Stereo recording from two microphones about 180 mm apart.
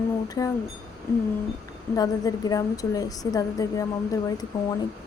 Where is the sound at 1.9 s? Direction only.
20° left (ahead or behind).